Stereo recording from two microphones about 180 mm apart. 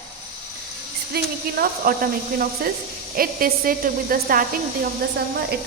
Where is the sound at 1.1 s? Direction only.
55° right (ahead or behind).